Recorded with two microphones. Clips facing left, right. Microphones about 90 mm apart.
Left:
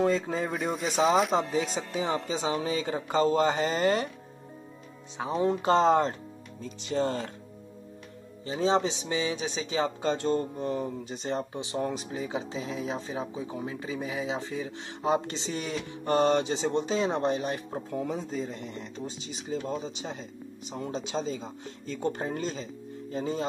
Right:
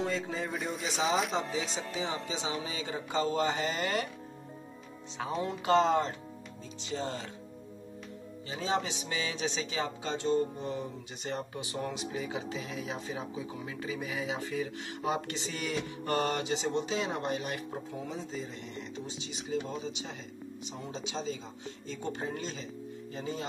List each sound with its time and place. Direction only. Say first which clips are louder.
0.0 s speech: left 7 dB; 45° left (ahead or behind)
0.6 s speech: left 7 dB; centre (ahead or behind)
1.3 s speech: left 6 dB; 50° left (ahead or behind); by 4.1 s 35° left (ahead or behind)
5.1 s speech: left 6 dB; 20° left (ahead or behind)
5.5 s speech: left 3 dB; 35° left (ahead or behind)
6.6 s speech: left 8 dB; 55° left (ahead or behind)
8.5 s speech: left 7 dB; 30° left (ahead or behind)
10.0 s speech: left 3 dB; 55° left (ahead or behind); by 17.8 s 30° left (ahead or behind)
17.9 s speech: left 9 dB; 55° left (ahead or behind); by 23.4 s 40° left (ahead or behind)